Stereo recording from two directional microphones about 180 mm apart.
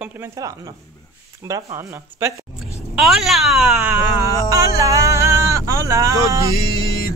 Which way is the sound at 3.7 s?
15° right (ahead or behind).